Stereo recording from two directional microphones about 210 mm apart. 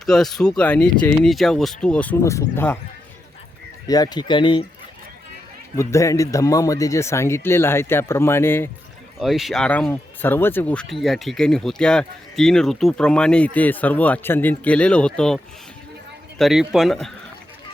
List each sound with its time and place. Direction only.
0.0 s speech: centre (ahead or behind)
3.8 s speech: 20° left (ahead or behind)
5.7 s speech: 15° left (ahead or behind)
9.2 s speech: centre (ahead or behind)
16.4 s speech: centre (ahead or behind)